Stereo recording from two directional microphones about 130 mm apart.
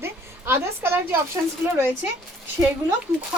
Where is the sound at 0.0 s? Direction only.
20° right (ahead or behind).